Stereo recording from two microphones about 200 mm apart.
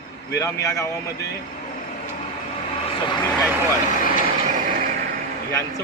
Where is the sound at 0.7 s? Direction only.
15° left (ahead or behind).